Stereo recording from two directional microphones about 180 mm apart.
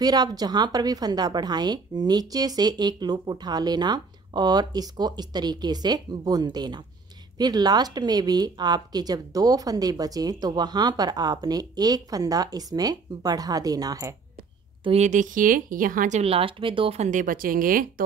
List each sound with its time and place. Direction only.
0.0 s a woman's voice: 20° right (ahead or behind)
14.8 s speech: 35° right (ahead or behind)